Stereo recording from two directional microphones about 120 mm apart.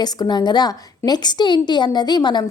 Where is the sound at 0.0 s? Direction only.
35° left (ahead or behind).